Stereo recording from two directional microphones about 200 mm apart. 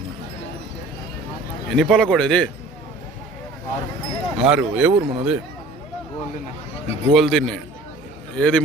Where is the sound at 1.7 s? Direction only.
Centre (ahead or behind).